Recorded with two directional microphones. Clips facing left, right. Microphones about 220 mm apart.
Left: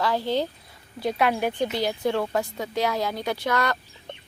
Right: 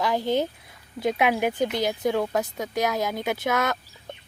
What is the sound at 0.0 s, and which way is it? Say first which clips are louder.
Speech: right 1 dB; 15° right (ahead or behind).